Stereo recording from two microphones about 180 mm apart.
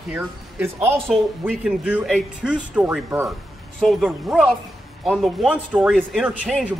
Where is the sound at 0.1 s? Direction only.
10° right (ahead or behind).